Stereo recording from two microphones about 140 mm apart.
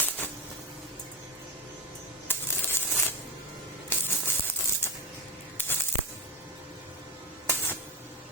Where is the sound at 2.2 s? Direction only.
15° left (ahead or behind).